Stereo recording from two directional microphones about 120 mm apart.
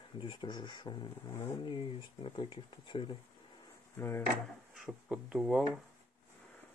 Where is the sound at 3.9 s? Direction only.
20° left (ahead or behind).